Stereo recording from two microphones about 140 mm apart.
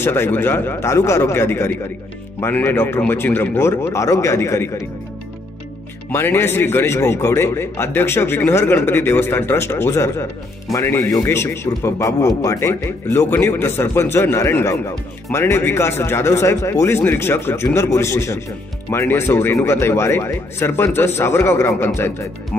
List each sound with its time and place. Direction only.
0.0 s a man's voice: 15° left (ahead or behind)
6.1 s a man's voice: 15° left (ahead or behind)